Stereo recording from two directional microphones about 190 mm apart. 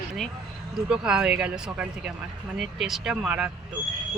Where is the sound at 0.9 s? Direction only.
5° right (ahead or behind).